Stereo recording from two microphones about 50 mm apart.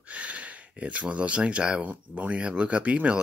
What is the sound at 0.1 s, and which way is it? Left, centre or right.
Speech, right.